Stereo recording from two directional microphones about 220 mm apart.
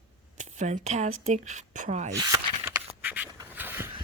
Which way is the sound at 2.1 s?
15° right (ahead or behind).